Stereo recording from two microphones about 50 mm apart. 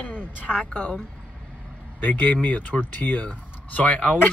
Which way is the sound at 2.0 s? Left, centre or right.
Left.